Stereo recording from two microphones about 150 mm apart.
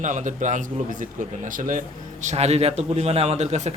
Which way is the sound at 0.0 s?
55° right (ahead or behind).